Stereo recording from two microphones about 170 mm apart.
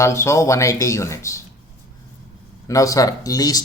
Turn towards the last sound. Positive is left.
turn(degrees=20)  # may be behind; listen again after turning